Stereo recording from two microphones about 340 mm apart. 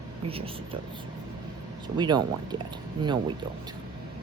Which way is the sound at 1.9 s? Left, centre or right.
Centre.